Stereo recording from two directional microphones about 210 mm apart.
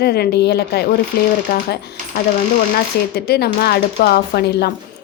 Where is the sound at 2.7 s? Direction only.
50° left (ahead or behind).